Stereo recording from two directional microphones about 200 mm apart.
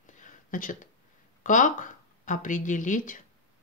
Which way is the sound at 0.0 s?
40° left (ahead or behind).